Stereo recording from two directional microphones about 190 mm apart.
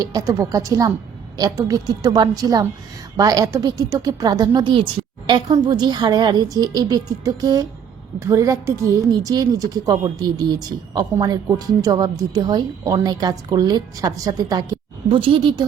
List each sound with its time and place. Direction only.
0.0 s a woman's voice: 15° right (ahead or behind)